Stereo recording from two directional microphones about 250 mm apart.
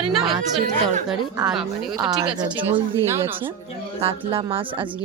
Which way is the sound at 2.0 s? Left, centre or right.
Centre.